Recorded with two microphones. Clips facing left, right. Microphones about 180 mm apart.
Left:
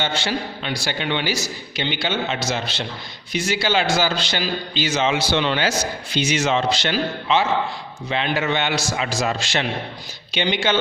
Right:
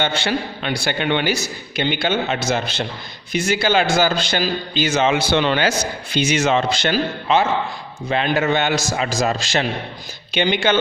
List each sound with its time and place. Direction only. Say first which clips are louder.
0.0 s a man's voice: right 3 dB; 60° right (ahead or behind); by 9.6 s 40° right (ahead or behind)
10.3 s a man's voice: right 3 dB; 50° right (ahead or behind)